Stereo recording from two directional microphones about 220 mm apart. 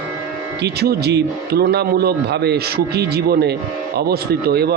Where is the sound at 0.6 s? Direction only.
45° right (ahead or behind).